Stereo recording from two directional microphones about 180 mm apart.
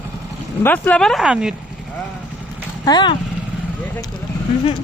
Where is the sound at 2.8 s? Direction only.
25° left (ahead or behind).